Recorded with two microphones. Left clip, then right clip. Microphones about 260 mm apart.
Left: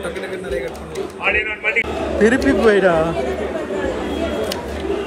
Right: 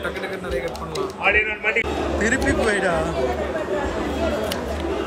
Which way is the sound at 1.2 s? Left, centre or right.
Right.